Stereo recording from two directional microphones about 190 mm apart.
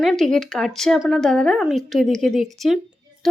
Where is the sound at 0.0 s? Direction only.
Centre (ahead or behind).